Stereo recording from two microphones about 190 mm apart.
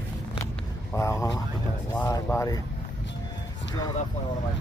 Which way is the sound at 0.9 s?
15° left (ahead or behind).